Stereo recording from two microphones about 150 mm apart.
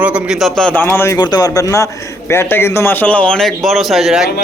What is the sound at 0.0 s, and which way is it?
A man's voice, 5° right (ahead or behind).